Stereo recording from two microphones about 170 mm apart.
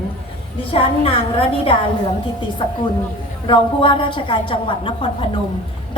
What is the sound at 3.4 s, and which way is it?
A woman's voice, 30° left (ahead or behind).